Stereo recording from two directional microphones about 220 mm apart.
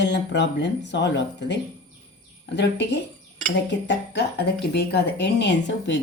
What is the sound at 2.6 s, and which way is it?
Speech, 50° left (ahead or behind).